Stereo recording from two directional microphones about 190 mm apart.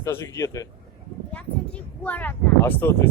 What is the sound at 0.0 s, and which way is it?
Speech, 15° left (ahead or behind).